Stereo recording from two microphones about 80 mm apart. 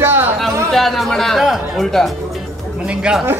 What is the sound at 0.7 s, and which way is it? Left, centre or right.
Speech, centre.